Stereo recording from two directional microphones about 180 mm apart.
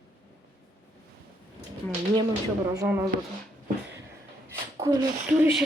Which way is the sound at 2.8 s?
15° right (ahead or behind).